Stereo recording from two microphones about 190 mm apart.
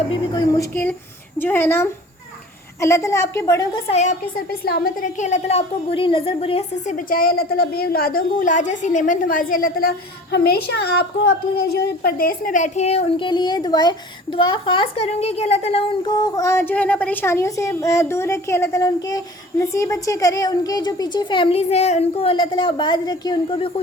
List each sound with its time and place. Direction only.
0.3 s a woman's voice: 15° left (ahead or behind)
3.8 s a woman's voice: 35° left (ahead or behind)
4.4 s a woman's voice: 55° left (ahead or behind); by 23.8 s 30° left (ahead or behind)